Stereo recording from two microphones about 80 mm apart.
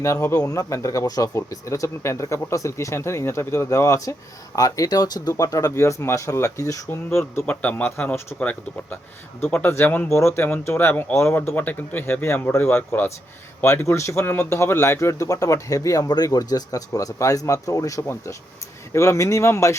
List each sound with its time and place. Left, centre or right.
0.0 s speech: left
5.4 s speech: left
7.4 s speech: centre
8.4 s speech: centre
10.1 s speech: left